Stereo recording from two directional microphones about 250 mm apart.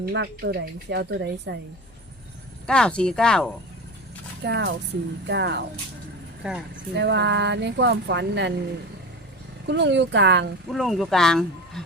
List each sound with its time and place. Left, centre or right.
0.0 s a woman's voice: right
2.6 s speech: centre
4.4 s speech: right
6.4 s speech: centre
6.9 s speech: right
9.6 s speech: right
10.7 s speech: centre